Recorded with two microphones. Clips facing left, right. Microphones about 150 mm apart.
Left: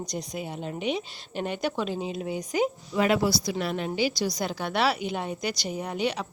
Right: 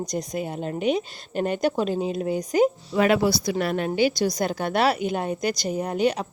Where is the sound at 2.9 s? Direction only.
65° right (ahead or behind).